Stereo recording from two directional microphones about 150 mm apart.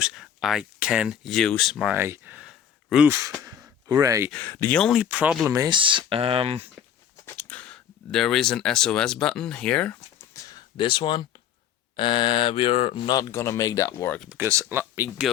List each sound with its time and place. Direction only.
0.0 s speech: 5° right (ahead or behind)
1.9 s speech: 15° right (ahead or behind)
2.5 s a sound: 5° right (ahead or behind)
3.1 s speech: 20° right (ahead or behind)
4.3 s speech: 10° left (ahead or behind)
5.0 s speech: 10° right (ahead or behind)
5.5 s speech: 25° right (ahead or behind)
7.3 s speech: 10° left (ahead or behind)
10.5 s speech: 35° left (ahead or behind)
14.3 s speech: 15° right (ahead or behind)